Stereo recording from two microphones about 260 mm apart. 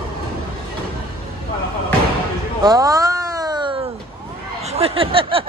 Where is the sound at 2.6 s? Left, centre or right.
Centre.